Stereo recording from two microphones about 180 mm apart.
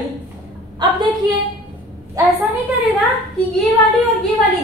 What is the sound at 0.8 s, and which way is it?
Speech, 25° right (ahead or behind).